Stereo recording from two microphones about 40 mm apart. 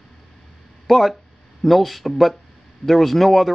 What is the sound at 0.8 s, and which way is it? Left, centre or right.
Speech, centre.